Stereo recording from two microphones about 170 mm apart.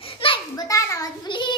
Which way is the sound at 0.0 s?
30° left (ahead or behind).